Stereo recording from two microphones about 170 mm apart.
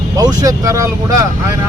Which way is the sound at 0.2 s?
20° right (ahead or behind).